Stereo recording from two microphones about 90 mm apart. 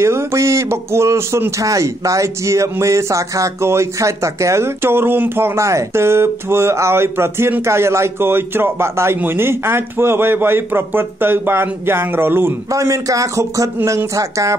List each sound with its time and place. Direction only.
0.0 s a man's voice: 30° right (ahead or behind)
12.7 s a man's voice: 35° right (ahead or behind)